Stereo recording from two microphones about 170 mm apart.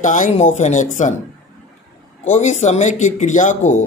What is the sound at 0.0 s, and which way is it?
Speech, 45° left (ahead or behind).